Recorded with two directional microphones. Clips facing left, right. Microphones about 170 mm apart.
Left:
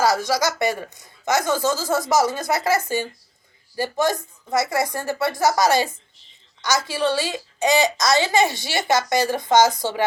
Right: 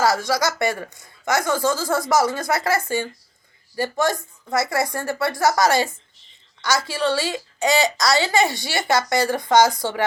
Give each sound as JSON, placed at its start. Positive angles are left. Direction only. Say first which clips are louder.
{"t": 0.0, "sound": "a child's voice", "louder": "even", "side_deg": 20}